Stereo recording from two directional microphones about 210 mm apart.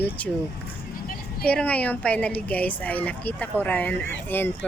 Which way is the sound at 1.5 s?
5° left (ahead or behind).